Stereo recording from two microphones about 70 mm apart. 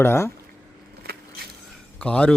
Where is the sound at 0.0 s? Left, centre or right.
Left.